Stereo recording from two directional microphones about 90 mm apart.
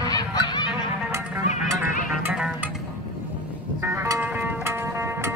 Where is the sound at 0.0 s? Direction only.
45° left (ahead or behind).